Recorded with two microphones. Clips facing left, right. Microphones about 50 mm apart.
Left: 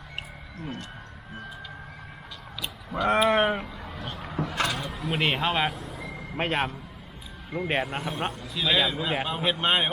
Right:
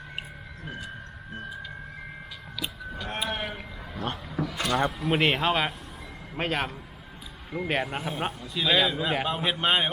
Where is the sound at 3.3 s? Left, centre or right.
Left.